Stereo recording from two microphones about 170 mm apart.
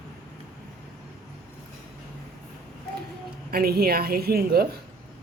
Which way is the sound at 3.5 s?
65° right (ahead or behind).